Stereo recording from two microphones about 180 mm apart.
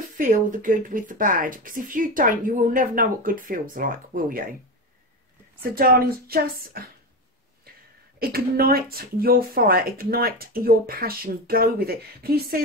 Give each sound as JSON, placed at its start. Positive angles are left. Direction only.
{"t": 0.2, "sound": "speech", "side_deg": -50}
{"t": 5.6, "sound": "speech", "side_deg": -55}
{"t": 8.2, "sound": "speech", "side_deg": -55}